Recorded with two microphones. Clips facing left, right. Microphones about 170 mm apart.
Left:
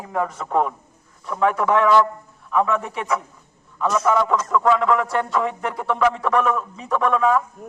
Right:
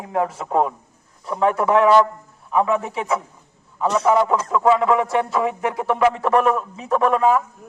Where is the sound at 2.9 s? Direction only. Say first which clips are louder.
Right 2 dB; 30° right (ahead or behind).